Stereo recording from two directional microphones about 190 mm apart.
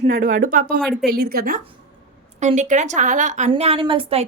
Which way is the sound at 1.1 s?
50° right (ahead or behind).